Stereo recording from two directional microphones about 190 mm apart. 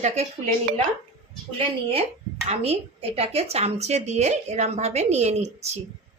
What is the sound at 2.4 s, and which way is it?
Speech, 30° right (ahead or behind).